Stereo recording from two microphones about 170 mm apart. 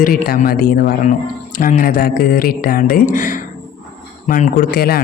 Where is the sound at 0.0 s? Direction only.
55° left (ahead or behind).